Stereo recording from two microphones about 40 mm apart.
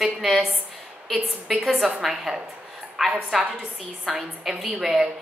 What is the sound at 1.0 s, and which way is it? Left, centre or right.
A woman's voice, centre.